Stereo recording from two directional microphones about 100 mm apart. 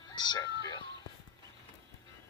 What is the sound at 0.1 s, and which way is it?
Music, 45° left (ahead or behind).